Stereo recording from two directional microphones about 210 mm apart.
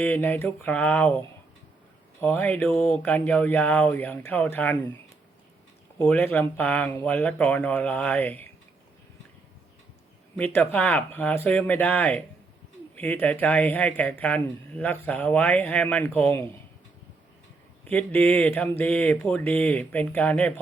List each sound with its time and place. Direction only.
0.0 s speech: 5° left (ahead or behind)
2.2 s speech: 5° left (ahead or behind)
6.0 s speech: 10° left (ahead or behind)
10.3 s speech: 10° left (ahead or behind)
17.8 s speech: 5° left (ahead or behind)